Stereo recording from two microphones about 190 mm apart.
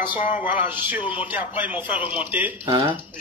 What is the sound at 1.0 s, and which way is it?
Speech, 25° left (ahead or behind).